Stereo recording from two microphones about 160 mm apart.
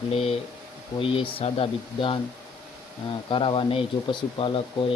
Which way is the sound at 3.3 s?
30° left (ahead or behind).